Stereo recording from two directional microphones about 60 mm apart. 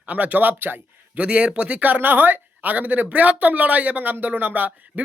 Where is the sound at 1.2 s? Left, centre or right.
Centre.